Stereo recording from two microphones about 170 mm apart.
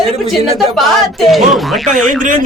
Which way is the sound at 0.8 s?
Centre (ahead or behind).